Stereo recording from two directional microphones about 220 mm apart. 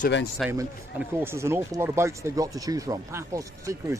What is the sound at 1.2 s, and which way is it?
Speech, 10° right (ahead or behind).